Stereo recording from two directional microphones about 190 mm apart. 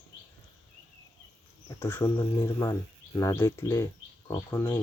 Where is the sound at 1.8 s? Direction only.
10° left (ahead or behind).